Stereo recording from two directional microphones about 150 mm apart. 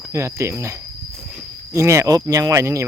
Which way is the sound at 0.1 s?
20° right (ahead or behind).